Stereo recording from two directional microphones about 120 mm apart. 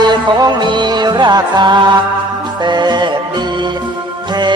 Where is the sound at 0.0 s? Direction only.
35° right (ahead or behind).